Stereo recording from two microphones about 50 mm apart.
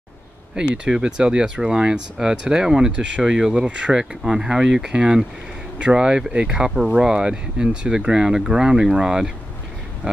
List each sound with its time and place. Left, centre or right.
0.8 s speech: centre